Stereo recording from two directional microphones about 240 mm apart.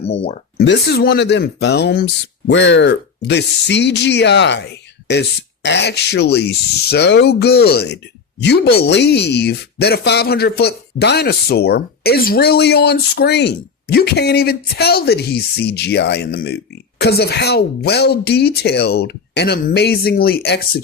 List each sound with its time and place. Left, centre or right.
0.0 s speech: left
0.5 s speech: left